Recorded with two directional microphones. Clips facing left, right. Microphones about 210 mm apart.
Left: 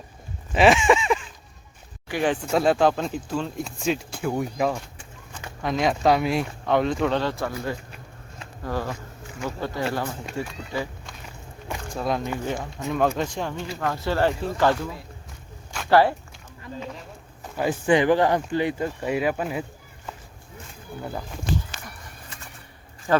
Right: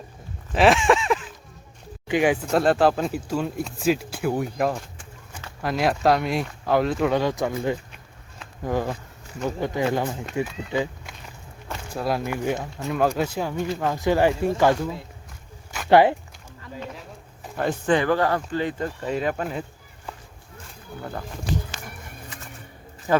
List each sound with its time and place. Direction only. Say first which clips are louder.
0.5 s a sound: even; centre (ahead or behind)
2.0 s speech: right 3 dB; 15° right (ahead or behind)
2.5 s speech: left 2 dB; centre (ahead or behind); by 10.4 s 20° right (ahead or behind)
11.9 s speech: right 1 dB; 5° right (ahead or behind)
15.9 s speech: right 2 dB; 20° right (ahead or behind)
16.8 s speech: right 2 dB; centre (ahead or behind)
17.6 s speech: left 1 dB; 10° left (ahead or behind)
21.0 s speech: left 1 dB; 10° left (ahead or behind)
23.1 s speech: even; 10° right (ahead or behind)